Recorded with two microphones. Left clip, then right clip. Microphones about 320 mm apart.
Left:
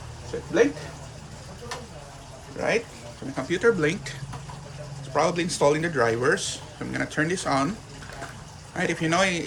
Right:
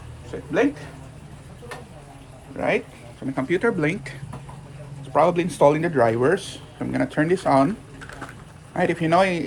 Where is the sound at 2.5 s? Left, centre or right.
Right.